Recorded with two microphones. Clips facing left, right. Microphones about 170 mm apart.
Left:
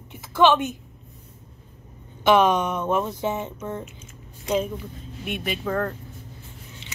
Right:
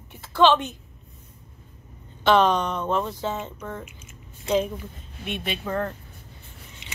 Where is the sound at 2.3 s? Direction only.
10° left (ahead or behind).